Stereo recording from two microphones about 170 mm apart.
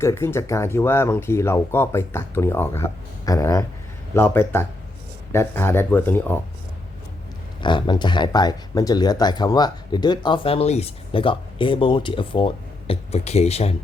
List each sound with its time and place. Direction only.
0.0 s speech: 15° left (ahead or behind)
7.6 s speech: 25° left (ahead or behind)